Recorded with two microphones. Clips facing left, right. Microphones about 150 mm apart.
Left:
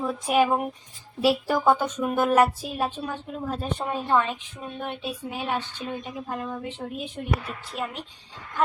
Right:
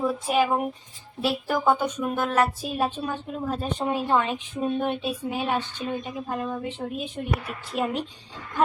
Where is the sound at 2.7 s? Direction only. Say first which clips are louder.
Right 2 dB; 15° right (ahead or behind).